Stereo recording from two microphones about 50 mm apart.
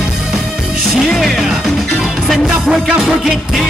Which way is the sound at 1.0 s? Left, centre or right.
Centre.